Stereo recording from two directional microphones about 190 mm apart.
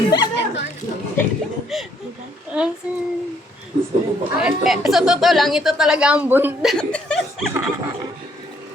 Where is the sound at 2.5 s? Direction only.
5° right (ahead or behind).